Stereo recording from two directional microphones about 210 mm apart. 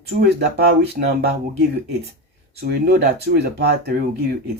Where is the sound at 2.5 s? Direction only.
50° right (ahead or behind).